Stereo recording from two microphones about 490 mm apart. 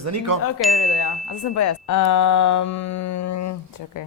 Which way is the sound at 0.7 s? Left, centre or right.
Left.